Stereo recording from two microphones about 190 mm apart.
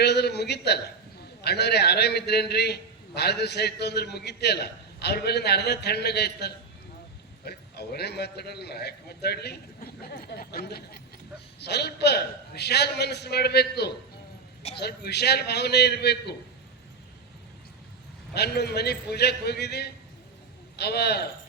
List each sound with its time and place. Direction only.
0.0 s a sound: 60° left (ahead or behind)
1.5 s a man's voice: 60° left (ahead or behind)
18.3 s a man's voice: 60° left (ahead or behind)